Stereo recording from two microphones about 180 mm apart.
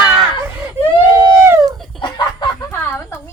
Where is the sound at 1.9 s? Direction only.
25° left (ahead or behind).